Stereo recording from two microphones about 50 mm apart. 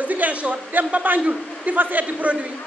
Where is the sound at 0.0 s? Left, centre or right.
Right.